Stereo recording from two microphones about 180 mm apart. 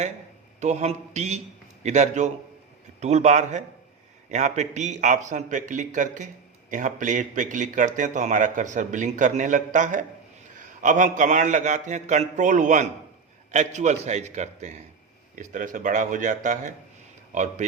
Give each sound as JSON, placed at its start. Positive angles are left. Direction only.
{"t": 0.6, "sound": "a man's voice", "side_deg": -40}